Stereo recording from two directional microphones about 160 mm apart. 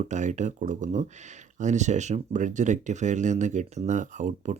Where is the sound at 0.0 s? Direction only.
50° right (ahead or behind).